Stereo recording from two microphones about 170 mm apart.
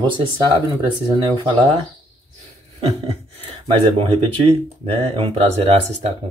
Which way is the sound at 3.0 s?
35° right (ahead or behind).